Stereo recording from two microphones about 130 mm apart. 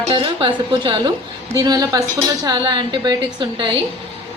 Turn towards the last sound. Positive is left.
turn(degrees=-35)  # may be behind; listen again after turning